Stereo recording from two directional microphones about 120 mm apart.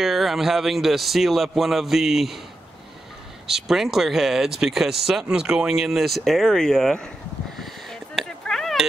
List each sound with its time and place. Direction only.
0.0 s speech: centre (ahead or behind)
3.4 s speech: centre (ahead or behind)
7.9 s a sound: 5° left (ahead or behind)